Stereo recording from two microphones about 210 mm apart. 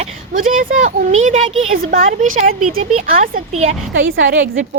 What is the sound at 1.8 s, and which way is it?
Speech, 40° right (ahead or behind).